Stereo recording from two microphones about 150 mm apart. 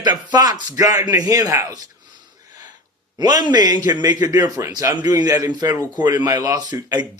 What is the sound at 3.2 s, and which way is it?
A man's voice, 25° right (ahead or behind).